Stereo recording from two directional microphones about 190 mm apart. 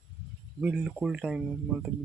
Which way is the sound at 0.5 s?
5° right (ahead or behind).